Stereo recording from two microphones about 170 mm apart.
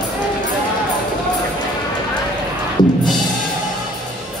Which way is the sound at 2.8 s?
25° left (ahead or behind).